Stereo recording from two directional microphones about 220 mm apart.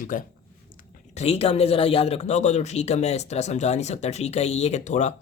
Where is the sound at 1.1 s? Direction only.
25° left (ahead or behind).